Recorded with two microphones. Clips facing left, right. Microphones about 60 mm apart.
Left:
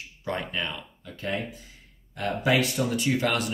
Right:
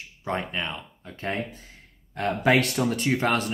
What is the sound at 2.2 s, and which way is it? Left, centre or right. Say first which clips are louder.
Speech: right 3 dB; right.